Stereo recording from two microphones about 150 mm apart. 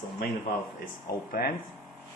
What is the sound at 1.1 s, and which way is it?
Speech, 90° left.